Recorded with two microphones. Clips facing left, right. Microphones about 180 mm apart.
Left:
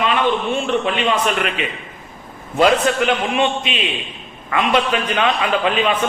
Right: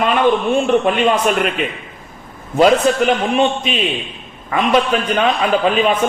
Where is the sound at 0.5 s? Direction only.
45° right (ahead or behind).